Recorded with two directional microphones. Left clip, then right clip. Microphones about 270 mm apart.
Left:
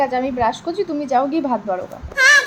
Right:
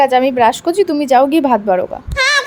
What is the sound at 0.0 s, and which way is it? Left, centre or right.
A woman's voice, right.